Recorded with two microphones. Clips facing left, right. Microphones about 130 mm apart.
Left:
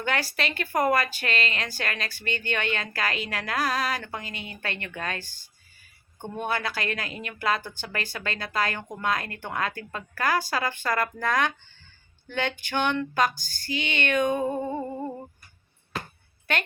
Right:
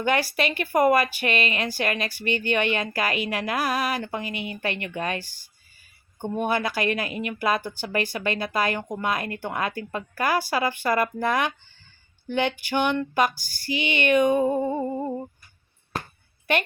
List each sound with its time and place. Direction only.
0.0 s speech: 15° right (ahead or behind)